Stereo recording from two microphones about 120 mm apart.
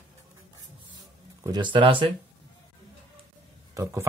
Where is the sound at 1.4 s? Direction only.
35° right (ahead or behind).